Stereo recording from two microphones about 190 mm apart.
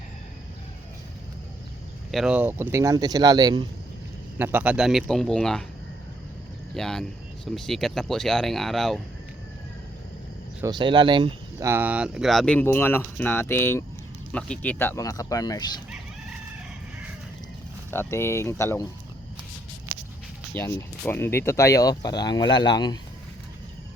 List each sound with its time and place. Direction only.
2.1 s speech: 5° right (ahead or behind); by 3.6 s 20° right (ahead or behind)
4.4 s speech: 10° right (ahead or behind)
6.7 s speech: centre (ahead or behind)
10.6 s speech: 25° right (ahead or behind)
11.7 s speech: 10° right (ahead or behind); by 15.7 s 20° left (ahead or behind)
17.9 s speech: 10° left (ahead or behind)
20.5 s speech: 10° left (ahead or behind)